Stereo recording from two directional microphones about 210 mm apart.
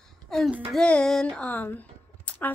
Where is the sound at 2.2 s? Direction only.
10° left (ahead or behind).